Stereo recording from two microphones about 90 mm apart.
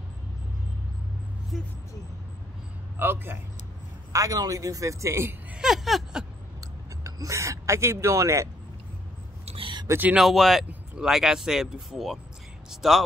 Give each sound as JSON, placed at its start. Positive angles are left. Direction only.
{"t": 1.5, "sound": "speech", "side_deg": 0}
{"t": 3.0, "sound": "a man's voice", "side_deg": -25}
{"t": 4.1, "sound": "speech", "side_deg": -40}
{"t": 5.5, "sound": "speech", "side_deg": -5}
{"t": 7.0, "sound": "speech", "side_deg": -35}
{"t": 9.6, "sound": "a sound", "side_deg": -60}
{"t": 10.1, "sound": "a man's voice", "side_deg": 0}